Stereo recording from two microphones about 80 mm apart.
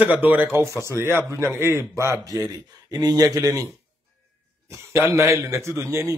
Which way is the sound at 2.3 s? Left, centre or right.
Right.